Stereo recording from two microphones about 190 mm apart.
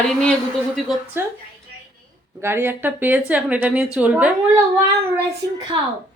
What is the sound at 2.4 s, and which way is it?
Speech, 10° right (ahead or behind).